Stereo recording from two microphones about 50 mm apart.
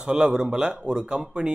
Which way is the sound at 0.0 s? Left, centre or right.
Centre.